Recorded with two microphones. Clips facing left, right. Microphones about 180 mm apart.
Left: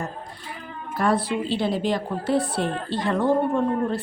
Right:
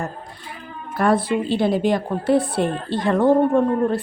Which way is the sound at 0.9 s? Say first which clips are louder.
Right 4 dB; 55° right (ahead or behind).